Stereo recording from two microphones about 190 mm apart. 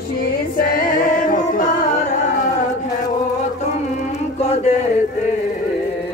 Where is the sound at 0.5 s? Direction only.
50° left (ahead or behind).